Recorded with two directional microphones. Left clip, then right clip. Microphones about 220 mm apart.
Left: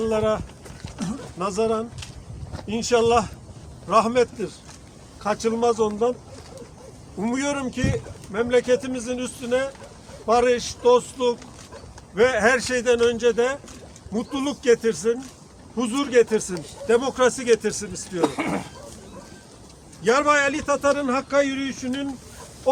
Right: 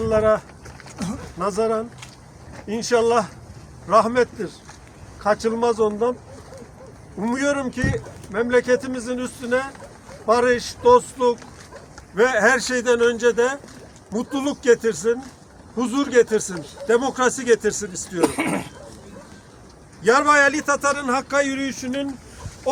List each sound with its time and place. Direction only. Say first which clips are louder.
0.0 s speech: right 4 dB; 15° right (ahead or behind)
7.2 s a man's voice: right 3 dB; 15° right (ahead or behind)
18.2 s a man's voice: right 3 dB; 50° right (ahead or behind)
20.1 s a man's voice: right 3 dB; 35° right (ahead or behind)